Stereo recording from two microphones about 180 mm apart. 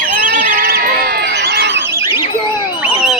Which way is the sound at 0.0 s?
55° right (ahead or behind).